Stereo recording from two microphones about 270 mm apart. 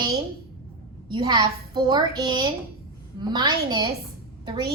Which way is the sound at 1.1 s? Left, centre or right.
Centre.